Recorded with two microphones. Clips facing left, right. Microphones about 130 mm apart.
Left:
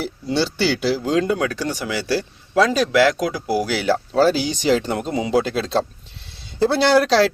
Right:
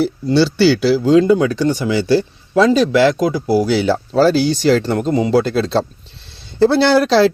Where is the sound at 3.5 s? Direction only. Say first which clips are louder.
Right 4 dB; 10° left (ahead or behind).